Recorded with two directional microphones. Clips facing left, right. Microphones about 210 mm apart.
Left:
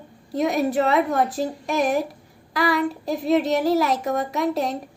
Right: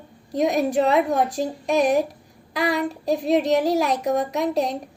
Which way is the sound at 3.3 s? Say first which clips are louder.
Left 1 dB; 15° right (ahead or behind).